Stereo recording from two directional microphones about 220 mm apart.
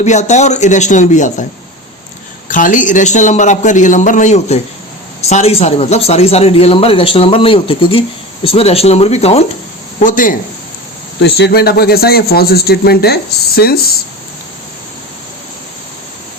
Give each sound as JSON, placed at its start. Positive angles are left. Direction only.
{"t": 0.0, "sound": "a man's voice", "side_deg": 30}
{"t": 2.5, "sound": "a man's voice", "side_deg": 35}
{"t": 11.2, "sound": "speech", "side_deg": 50}